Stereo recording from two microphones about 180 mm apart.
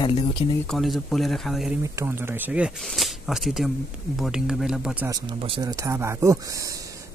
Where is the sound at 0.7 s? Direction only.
Centre (ahead or behind).